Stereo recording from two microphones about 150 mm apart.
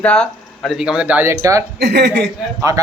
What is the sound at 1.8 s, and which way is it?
Speech, 90° right.